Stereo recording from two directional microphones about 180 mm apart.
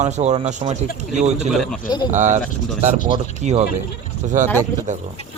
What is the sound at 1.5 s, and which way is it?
Speech, centre (ahead or behind).